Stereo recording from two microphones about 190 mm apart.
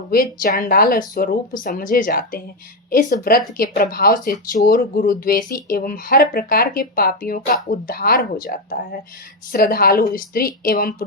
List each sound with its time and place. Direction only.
0.1 s speech: 50° left (ahead or behind)